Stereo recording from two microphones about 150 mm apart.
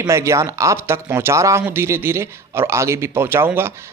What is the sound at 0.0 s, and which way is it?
A man's voice, 20° right (ahead or behind).